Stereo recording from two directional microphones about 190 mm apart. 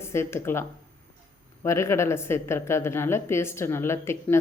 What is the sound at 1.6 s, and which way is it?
A woman's voice, 15° left (ahead or behind).